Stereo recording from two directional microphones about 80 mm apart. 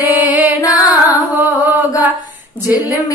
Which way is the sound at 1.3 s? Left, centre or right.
Right.